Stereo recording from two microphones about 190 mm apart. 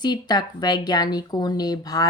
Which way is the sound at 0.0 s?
20° left (ahead or behind).